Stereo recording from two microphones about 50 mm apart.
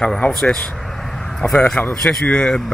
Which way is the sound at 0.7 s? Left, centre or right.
Centre.